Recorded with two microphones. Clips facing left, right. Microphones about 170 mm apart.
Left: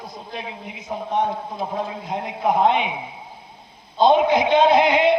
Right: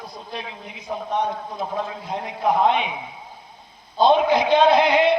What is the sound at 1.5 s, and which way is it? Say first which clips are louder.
A man's voice: left 1 dB; 20° left (ahead or behind).